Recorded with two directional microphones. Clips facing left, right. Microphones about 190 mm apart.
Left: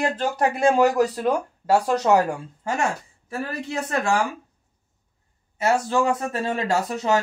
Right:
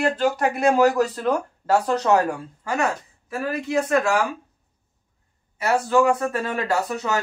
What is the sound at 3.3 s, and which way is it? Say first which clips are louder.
Speech: right 4 dB; 35° left (ahead or behind).